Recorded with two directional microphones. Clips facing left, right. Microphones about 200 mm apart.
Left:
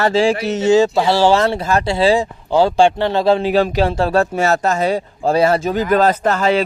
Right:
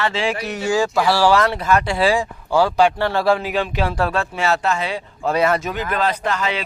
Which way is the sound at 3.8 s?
25° left (ahead or behind).